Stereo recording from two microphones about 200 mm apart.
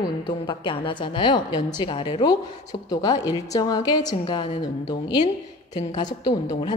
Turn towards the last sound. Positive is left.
turn(degrees=20)  # may be behind; listen again after turning